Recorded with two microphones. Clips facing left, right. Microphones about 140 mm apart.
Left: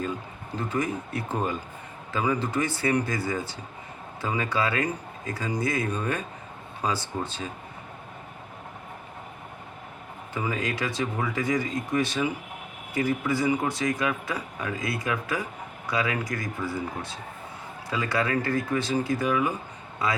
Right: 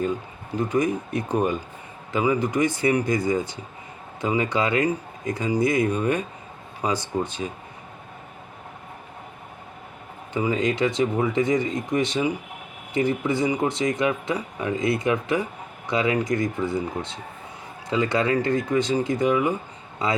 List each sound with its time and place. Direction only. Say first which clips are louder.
0.5 s speech: right 6 dB; 15° right (ahead or behind)
10.3 s speech: right 7 dB; 20° right (ahead or behind)